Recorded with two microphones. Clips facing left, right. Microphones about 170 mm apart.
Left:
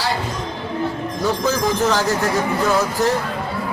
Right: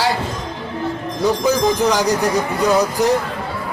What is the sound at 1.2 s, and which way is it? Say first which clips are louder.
Speech: right 4 dB; 15° right (ahead or behind).